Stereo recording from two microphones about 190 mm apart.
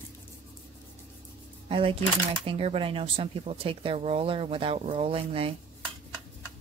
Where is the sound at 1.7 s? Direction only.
30° right (ahead or behind).